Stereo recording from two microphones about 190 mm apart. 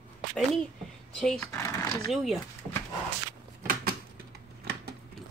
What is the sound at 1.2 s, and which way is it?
Speech, 5° left (ahead or behind).